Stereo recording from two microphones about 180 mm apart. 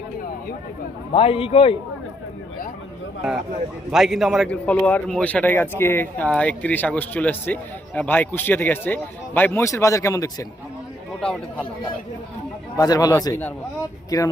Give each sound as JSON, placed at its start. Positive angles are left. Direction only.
{"t": 1.1, "sound": "a man's voice", "side_deg": 30}
{"t": 3.9, "sound": "a man's voice", "side_deg": 0}
{"t": 12.7, "sound": "speech", "side_deg": 20}